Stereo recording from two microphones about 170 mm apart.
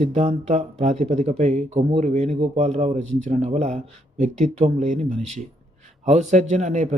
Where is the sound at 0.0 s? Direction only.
40° right (ahead or behind).